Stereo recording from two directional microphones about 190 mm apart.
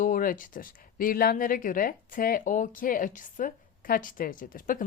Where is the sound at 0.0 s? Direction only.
45° left (ahead or behind).